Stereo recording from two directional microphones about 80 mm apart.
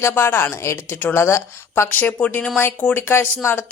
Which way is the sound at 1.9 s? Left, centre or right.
Left.